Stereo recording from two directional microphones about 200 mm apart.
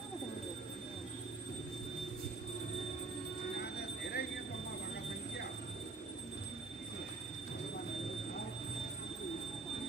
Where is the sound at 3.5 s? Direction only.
55° left (ahead or behind).